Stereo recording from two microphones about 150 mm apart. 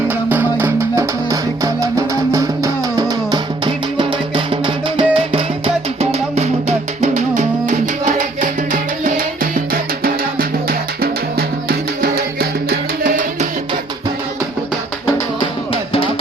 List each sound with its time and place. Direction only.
0.3 s music: 15° right (ahead or behind)
3.9 s music: 35° right (ahead or behind); by 9.5 s 65° right (ahead or behind)
10.7 s music: 90° right; by 13.2 s 75° right (ahead or behind)
15.4 s music: 40° left (ahead or behind)